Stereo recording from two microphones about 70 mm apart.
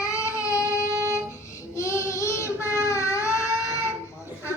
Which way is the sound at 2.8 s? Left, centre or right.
Left.